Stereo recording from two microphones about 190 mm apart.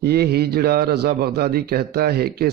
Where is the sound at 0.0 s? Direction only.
55° right (ahead or behind).